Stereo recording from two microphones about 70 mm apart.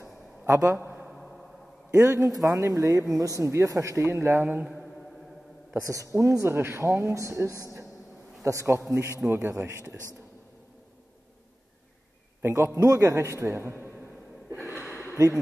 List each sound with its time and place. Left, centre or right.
0.7 s a sound: right
1.9 s a man's voice: right
4.4 s a man's voice: right
5.9 s a man's voice: right
12.4 s a man's voice: right
14.9 s a sound: left